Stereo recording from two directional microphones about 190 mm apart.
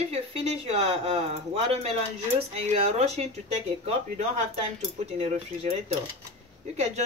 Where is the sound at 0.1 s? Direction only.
35° right (ahead or behind).